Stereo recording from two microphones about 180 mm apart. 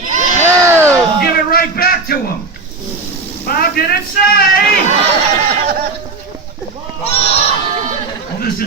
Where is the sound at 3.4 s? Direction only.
55° left (ahead or behind).